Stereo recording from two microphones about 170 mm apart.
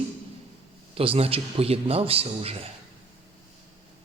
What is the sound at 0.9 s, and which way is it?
A man's voice, 35° right (ahead or behind).